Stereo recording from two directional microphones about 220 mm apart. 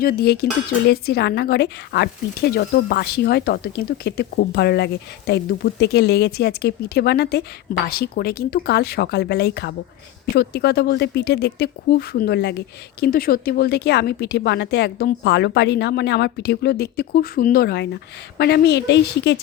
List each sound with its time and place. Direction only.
0.0 s speech: 45° left (ahead or behind)